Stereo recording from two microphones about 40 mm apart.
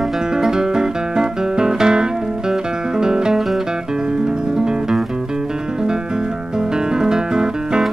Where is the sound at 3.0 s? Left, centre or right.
Centre.